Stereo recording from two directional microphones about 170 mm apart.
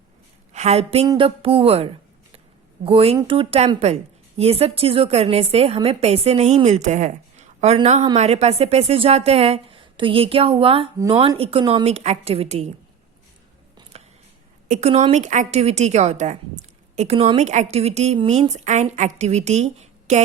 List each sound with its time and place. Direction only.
0.5 s a woman's voice: 40° right (ahead or behind)
13.9 s a sound: 40° right (ahead or behind)
14.7 s a woman's voice: 40° right (ahead or behind)